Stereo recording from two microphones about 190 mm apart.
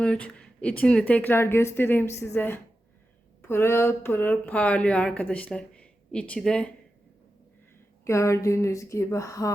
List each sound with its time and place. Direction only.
0.0 s speech: 5° left (ahead or behind)
8.0 s speech: 15° left (ahead or behind)